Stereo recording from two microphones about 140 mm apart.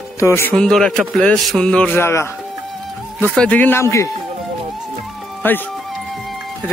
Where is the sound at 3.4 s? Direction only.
10° left (ahead or behind).